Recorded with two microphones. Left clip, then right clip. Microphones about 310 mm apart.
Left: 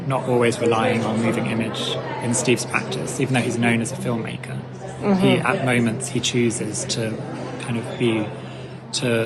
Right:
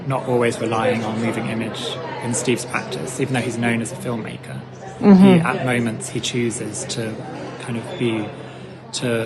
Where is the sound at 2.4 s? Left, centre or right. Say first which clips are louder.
Left 1 dB; centre.